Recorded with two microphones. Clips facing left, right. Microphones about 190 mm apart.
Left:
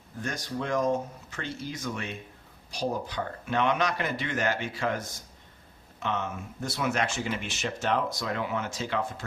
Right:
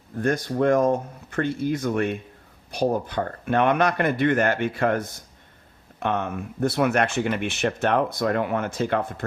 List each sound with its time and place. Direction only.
0.2 s speech: 55° right (ahead or behind)